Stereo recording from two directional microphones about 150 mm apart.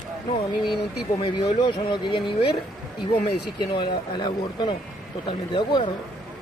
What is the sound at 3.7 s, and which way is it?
Speech, 30° left (ahead or behind).